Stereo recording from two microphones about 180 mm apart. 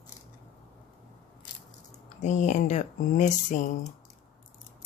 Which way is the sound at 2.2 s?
40° left (ahead or behind).